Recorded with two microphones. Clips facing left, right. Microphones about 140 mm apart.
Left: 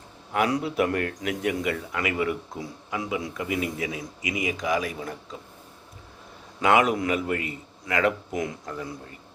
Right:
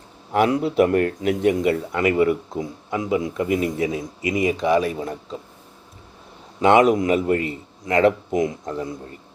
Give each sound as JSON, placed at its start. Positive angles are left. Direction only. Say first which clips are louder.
{"t": 0.3, "sound": "speech", "louder": "right 6 dB", "side_deg": -30}
{"t": 6.6, "sound": "a man's voice", "louder": "right 6 dB", "side_deg": -25}